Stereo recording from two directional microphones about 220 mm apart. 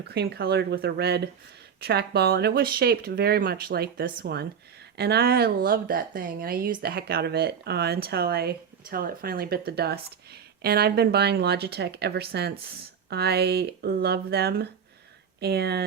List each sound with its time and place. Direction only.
0.0 s speech: 50° right (ahead or behind)